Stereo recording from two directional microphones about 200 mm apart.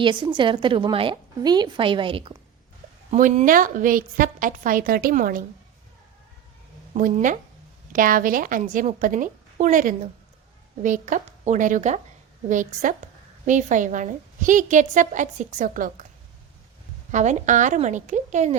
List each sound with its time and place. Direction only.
0.0 s a woman's voice: 25° right (ahead or behind)
3.1 s a woman's voice: 35° right (ahead or behind)
6.9 s a woman's voice: 40° right (ahead or behind)
17.1 s a woman's voice: 35° right (ahead or behind)